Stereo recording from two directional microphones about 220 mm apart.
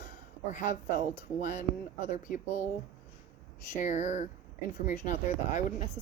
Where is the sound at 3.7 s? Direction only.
35° left (ahead or behind).